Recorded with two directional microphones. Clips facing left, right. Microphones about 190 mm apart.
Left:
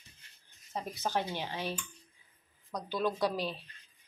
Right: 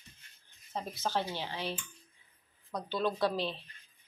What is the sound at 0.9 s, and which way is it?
Speech, 15° left (ahead or behind).